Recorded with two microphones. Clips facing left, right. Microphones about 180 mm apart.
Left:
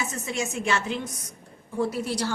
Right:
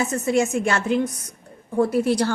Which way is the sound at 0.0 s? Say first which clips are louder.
Right 10 dB; 55° right (ahead or behind).